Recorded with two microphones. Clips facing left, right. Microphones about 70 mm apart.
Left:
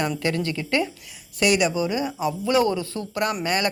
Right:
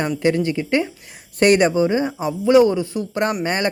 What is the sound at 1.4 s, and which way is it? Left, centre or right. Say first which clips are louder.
Speech: right 6 dB; right.